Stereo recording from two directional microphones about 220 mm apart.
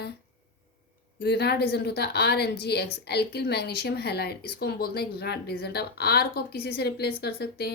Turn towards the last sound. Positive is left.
turn(degrees=45)  # may be behind; listen again after turning